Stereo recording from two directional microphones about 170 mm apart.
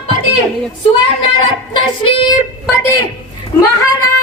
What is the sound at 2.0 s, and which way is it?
Speech, 30° left (ahead or behind).